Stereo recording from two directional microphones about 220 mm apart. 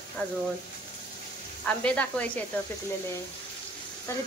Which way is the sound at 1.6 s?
5° left (ahead or behind).